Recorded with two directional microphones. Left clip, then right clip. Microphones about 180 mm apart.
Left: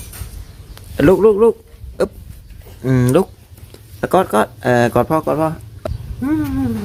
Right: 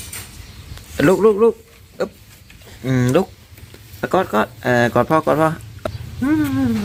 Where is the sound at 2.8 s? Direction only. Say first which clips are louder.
Left 2 dB; 25° left (ahead or behind); by 6.7 s 5° right (ahead or behind).